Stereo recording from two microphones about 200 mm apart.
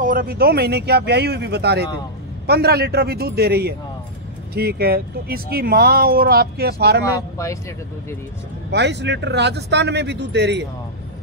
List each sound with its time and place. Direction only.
0.0 s speech: 45° right (ahead or behind)
8.6 s a man's voice: 60° right (ahead or behind)